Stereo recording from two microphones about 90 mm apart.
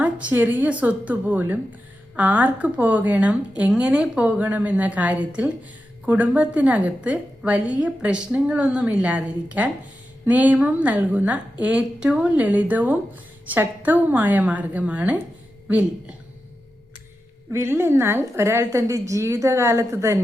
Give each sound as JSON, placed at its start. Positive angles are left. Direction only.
{"t": 0.0, "sound": "a woman's voice", "side_deg": -15}
{"t": 17.5, "sound": "a woman's voice", "side_deg": -30}